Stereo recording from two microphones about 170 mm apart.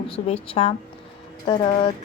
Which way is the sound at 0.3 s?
35° left (ahead or behind).